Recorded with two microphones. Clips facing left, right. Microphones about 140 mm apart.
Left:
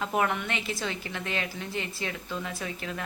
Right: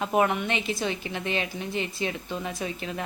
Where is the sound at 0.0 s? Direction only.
20° right (ahead or behind).